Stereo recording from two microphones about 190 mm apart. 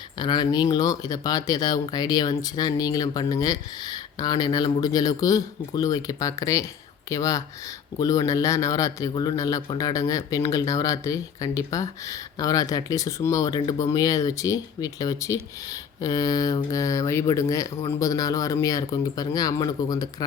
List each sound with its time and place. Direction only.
0.2 s a man's voice: 25° left (ahead or behind)